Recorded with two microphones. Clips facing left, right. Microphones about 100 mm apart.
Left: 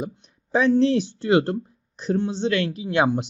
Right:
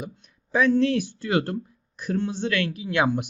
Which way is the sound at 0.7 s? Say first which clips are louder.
Left 3 dB; 25° left (ahead or behind).